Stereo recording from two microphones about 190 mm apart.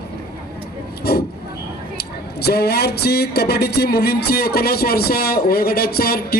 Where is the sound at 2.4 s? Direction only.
55° left (ahead or behind).